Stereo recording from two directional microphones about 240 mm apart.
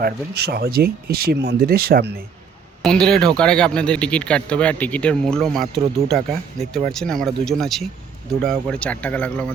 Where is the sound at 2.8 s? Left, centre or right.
Centre.